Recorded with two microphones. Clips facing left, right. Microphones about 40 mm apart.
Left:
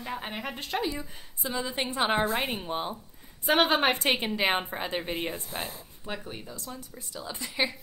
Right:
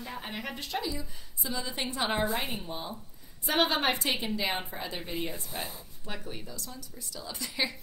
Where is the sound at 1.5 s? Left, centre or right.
Left.